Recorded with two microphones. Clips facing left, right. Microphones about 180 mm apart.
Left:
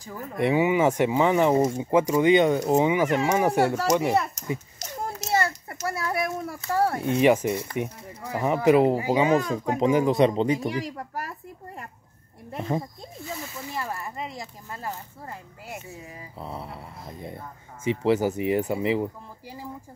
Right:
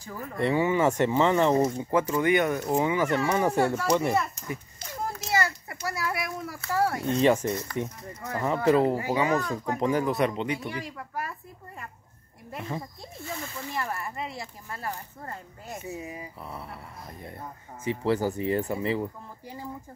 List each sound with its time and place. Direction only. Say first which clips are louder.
0.0 s speech: left 2 dB; 15° left (ahead or behind)
5.9 s speech: left 4 dB; 25° left (ahead or behind)
7.1 s speech: left 3 dB; 10° left (ahead or behind)
10.3 s speech: left 7 dB; 35° left (ahead or behind)
12.5 s speech: left 6 dB; 40° left (ahead or behind)
13.2 s speech: left 1 dB; 5° left (ahead or behind)
15.9 s speech: right 5 dB; 10° right (ahead or behind)
16.3 s speech: left 4 dB; 25° left (ahead or behind)